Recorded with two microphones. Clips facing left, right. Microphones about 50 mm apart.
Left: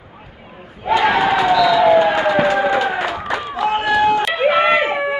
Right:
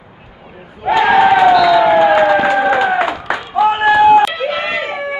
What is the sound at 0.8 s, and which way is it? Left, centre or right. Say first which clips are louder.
Crowd: right 5 dB; centre.